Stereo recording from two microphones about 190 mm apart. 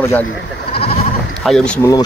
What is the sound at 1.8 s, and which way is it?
Speech, 20° left (ahead or behind).